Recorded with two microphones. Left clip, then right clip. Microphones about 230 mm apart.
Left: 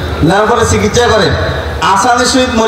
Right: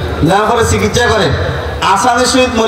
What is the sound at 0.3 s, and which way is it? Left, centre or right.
A man's voice, right.